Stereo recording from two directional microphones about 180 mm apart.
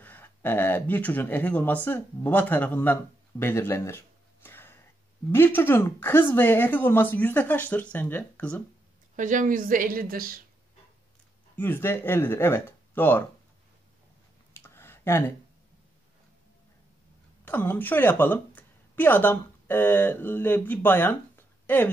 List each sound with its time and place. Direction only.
0.0 s a woman's voice: 10° left (ahead or behind)
9.1 s a woman's voice: 45° right (ahead or behind)
11.5 s a woman's voice: 10° left (ahead or behind)
14.5 s a sound: 15° left (ahead or behind)
17.5 s a woman's voice: 10° left (ahead or behind)